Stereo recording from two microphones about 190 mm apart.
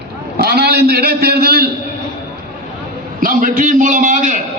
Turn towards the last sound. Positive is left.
turn(degrees=-40)  # may be behind; listen again after turning